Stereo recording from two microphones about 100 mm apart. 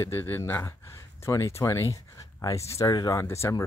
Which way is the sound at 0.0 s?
25° left (ahead or behind).